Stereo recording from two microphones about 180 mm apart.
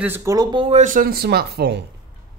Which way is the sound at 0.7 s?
45° right (ahead or behind).